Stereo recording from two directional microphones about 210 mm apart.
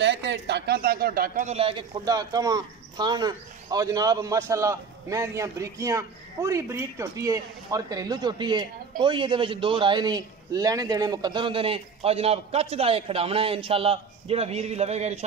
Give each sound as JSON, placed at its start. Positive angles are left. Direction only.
{"t": 0.0, "sound": "a man's voice", "side_deg": -55}